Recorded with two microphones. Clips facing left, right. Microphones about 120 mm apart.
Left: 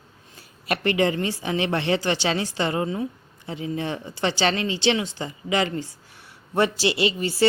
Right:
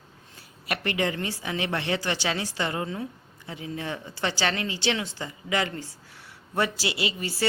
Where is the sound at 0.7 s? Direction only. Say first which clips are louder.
Left 6 dB; 30° left (ahead or behind).